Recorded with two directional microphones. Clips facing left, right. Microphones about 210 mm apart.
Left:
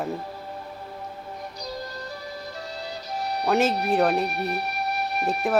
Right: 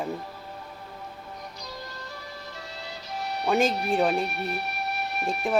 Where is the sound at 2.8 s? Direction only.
35° left (ahead or behind).